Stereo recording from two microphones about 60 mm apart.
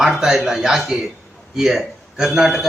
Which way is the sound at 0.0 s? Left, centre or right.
Centre.